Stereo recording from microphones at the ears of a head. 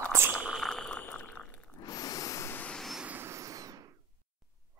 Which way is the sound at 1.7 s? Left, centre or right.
Left.